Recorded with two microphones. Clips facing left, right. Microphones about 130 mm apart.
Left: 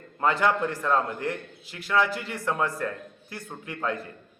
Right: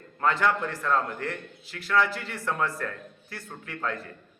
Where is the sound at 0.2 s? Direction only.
20° left (ahead or behind).